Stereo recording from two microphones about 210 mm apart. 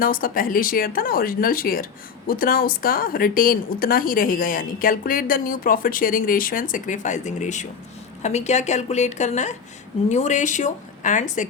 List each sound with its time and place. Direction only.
0.0 s a woman's voice: 40° left (ahead or behind)